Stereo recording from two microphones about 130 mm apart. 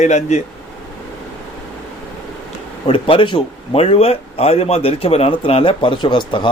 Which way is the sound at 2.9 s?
45° left (ahead or behind).